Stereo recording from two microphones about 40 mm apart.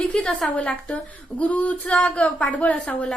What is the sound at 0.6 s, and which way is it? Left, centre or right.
Speech, left.